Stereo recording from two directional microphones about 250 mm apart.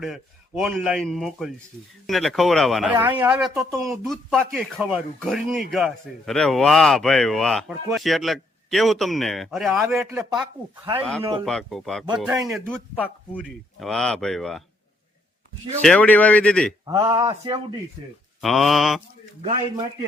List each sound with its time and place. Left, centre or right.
0.0 s speech: centre
10.2 s speech: centre
11.2 s speech: right
11.4 s speech: centre
12.2 s speech: centre
12.5 s speech: centre
15.8 s speech: centre
16.8 s speech: centre
18.3 s speech: centre